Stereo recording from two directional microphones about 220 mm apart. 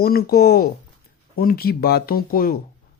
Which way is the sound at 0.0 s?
45° left (ahead or behind).